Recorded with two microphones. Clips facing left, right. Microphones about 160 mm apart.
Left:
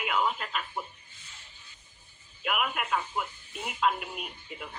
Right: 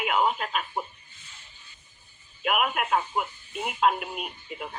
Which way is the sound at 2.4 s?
20° right (ahead or behind).